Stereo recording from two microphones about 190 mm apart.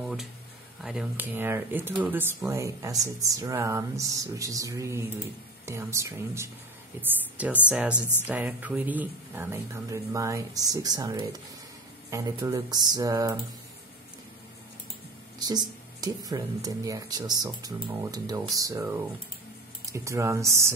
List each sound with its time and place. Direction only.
0.0 s a sound: centre (ahead or behind)
0.8 s speech: 5° right (ahead or behind)
15.3 s speech: 20° right (ahead or behind)